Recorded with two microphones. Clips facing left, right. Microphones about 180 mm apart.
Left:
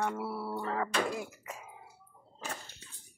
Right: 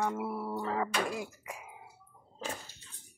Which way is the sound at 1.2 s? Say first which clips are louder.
Even; 15° right (ahead or behind).